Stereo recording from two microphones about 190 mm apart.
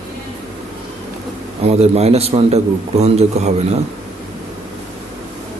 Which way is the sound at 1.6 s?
35° right (ahead or behind).